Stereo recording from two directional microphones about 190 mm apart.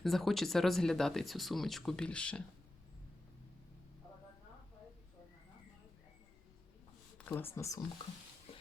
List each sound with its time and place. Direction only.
0.0 s speech: centre (ahead or behind)
7.3 s speech: 10° left (ahead or behind)
8.5 s a sound: 30° left (ahead or behind)